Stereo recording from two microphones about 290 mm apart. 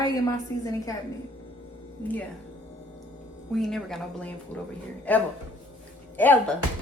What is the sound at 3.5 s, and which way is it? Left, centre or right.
Speech, centre.